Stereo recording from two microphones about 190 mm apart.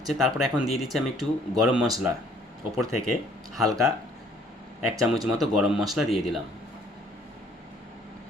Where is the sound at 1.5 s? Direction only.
Centre (ahead or behind).